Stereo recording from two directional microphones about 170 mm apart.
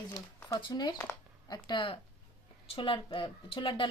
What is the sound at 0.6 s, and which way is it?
Speech, 25° left (ahead or behind).